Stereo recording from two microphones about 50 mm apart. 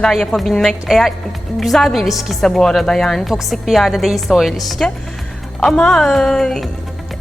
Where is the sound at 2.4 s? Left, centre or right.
Centre.